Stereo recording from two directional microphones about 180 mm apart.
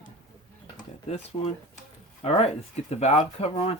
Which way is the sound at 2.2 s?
35° left (ahead or behind).